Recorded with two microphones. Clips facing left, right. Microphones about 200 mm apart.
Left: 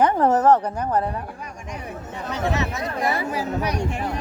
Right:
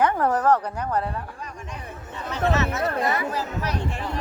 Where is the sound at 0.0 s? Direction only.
20° left (ahead or behind).